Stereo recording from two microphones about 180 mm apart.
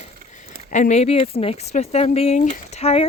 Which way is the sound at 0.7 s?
40° left (ahead or behind).